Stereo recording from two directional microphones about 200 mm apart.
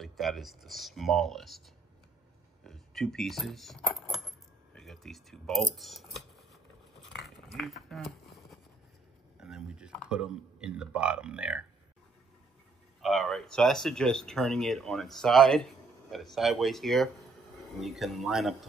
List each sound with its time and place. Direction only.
0.0 s speech: centre (ahead or behind)
2.6 s speech: centre (ahead or behind)
4.7 s shuffling cards: centre (ahead or behind)
7.4 s a sound: centre (ahead or behind)
9.4 s speech: 5° right (ahead or behind)
13.0 s speech: centre (ahead or behind)